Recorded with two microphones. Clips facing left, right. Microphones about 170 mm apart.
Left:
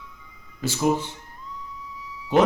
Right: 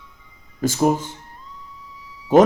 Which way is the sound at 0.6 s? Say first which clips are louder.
Right 4 dB; 45° right (ahead or behind).